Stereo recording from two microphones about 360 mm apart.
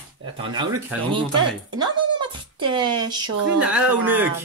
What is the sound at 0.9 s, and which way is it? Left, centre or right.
Speech, centre.